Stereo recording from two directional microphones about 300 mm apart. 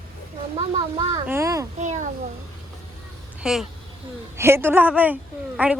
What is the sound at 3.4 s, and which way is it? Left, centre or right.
A woman's voice, centre.